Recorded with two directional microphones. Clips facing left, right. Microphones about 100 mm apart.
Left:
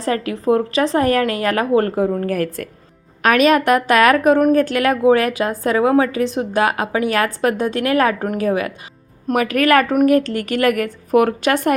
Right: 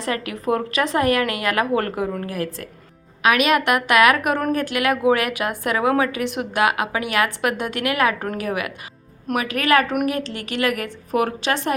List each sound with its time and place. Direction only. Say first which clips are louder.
0.0 s a woman's voice: left 5 dB; 35° left (ahead or behind)
2.2 s speech: left 6 dB; 50° left (ahead or behind)
3.2 s a woman's voice: left 4 dB; 35° left (ahead or behind)